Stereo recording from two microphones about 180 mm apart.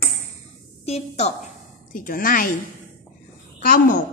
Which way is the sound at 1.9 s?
50° left (ahead or behind).